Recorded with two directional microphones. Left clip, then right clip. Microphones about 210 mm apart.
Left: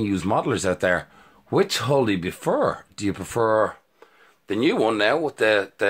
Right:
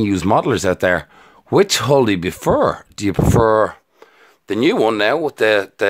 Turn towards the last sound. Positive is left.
turn(degrees=-40)  # may be behind; listen again after turning